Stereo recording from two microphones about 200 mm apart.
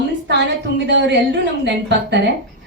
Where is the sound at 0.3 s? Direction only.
60° right (ahead or behind).